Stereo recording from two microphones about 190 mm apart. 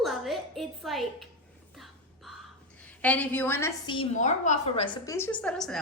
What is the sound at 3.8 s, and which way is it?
Speech, 25° left (ahead or behind).